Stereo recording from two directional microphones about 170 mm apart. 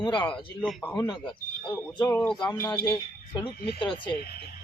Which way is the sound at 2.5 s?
15° left (ahead or behind).